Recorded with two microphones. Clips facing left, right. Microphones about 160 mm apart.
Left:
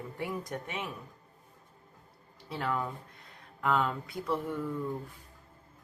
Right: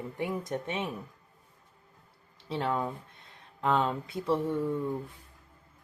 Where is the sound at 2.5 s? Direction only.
25° right (ahead or behind).